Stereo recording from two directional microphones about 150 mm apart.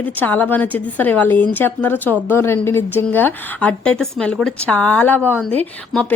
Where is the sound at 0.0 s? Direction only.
10° left (ahead or behind).